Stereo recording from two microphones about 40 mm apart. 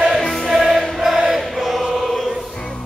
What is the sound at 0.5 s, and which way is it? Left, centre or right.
Choir, centre.